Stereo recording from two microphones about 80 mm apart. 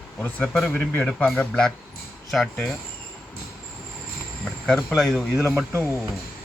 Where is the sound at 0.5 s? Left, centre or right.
Centre.